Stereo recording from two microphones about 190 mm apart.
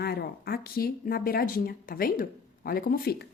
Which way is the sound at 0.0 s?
55° left (ahead or behind).